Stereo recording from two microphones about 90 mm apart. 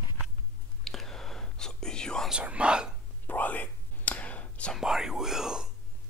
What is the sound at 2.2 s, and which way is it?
Speech, 10° right (ahead or behind).